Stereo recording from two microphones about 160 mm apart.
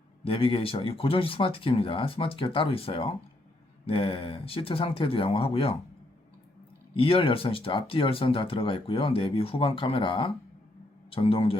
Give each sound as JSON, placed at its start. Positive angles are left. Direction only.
{"t": 0.3, "sound": "speech", "side_deg": 35}
{"t": 6.9, "sound": "speech", "side_deg": 35}